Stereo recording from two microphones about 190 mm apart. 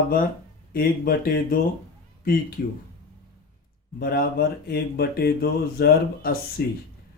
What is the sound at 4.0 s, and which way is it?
Speech, 55° left (ahead or behind).